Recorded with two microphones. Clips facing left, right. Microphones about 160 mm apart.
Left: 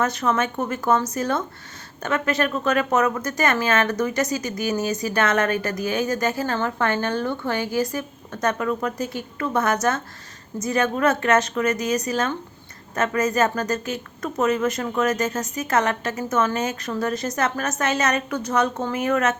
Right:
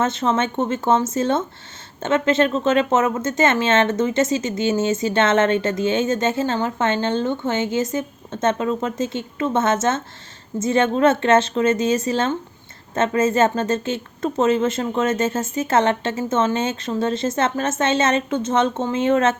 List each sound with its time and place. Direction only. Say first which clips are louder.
0.0 s speech: right 2 dB; 25° right (ahead or behind)